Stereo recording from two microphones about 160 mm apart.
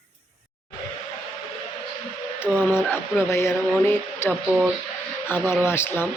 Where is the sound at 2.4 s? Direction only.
10° left (ahead or behind).